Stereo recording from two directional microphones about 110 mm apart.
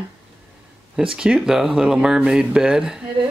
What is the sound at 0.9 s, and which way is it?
Speech, 5° right (ahead or behind).